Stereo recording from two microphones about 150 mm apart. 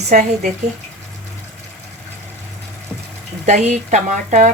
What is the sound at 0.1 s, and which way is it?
Speech, 50° right (ahead or behind).